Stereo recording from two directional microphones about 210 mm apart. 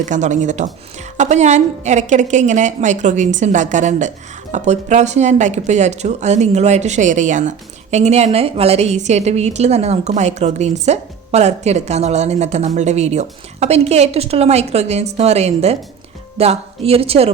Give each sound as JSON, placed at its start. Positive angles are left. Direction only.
{"t": 0.0, "sound": "a woman's voice", "side_deg": -35}